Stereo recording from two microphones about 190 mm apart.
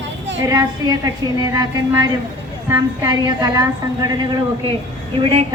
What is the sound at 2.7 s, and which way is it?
A woman's voice, 15° right (ahead or behind).